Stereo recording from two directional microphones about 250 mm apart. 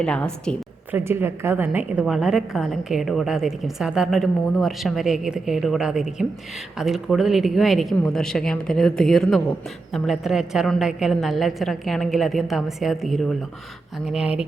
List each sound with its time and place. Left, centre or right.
0.0 s a woman's voice: centre
0.9 s a woman's voice: centre